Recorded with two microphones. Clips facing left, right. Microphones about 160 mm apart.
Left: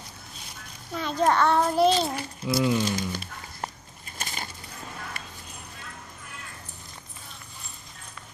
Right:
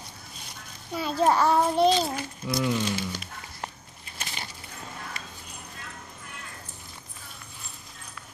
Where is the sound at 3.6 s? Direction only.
45° left (ahead or behind).